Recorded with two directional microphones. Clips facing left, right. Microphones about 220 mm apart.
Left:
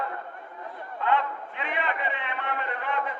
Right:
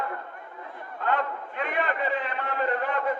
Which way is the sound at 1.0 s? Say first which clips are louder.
Left 1 dB; 45° right (ahead or behind).